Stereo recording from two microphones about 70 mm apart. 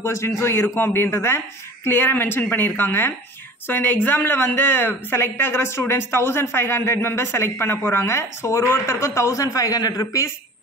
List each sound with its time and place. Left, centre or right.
0.0 s speech: left